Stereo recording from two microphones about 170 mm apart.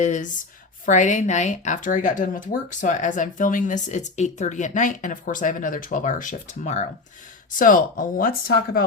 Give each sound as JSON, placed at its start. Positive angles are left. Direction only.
{"t": 0.0, "sound": "speech", "side_deg": 45}